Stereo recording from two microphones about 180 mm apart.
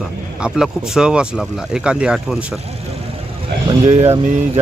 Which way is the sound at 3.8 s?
35° right (ahead or behind).